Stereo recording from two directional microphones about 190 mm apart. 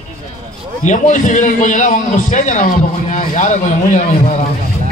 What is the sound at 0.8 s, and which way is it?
A man's voice, 40° left (ahead or behind).